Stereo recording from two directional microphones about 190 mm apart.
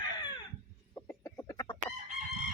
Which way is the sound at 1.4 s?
20° left (ahead or behind).